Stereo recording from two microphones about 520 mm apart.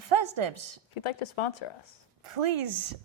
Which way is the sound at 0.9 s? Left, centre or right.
Left.